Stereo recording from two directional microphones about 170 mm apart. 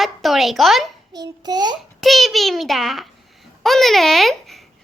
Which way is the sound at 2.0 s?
Centre (ahead or behind).